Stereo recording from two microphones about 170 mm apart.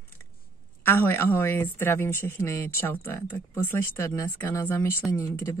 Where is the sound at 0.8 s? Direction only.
15° left (ahead or behind).